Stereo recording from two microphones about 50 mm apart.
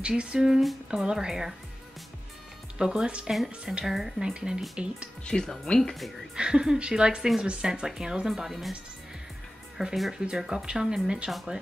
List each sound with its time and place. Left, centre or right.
0.1 s speech: centre
2.8 s speech: centre
5.2 s speech: centre
6.3 s speech: centre
9.8 s speech: centre